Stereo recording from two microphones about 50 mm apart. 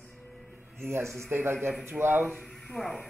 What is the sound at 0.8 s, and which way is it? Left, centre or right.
Speech, right.